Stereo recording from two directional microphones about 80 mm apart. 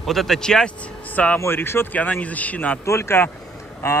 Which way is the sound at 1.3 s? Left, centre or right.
Left.